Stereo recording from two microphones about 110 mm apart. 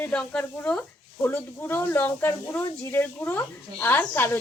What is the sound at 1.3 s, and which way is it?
Speech, 20° left (ahead or behind).